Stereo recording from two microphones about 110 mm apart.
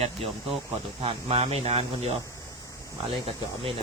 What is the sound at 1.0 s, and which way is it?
Speech, 60° right (ahead or behind).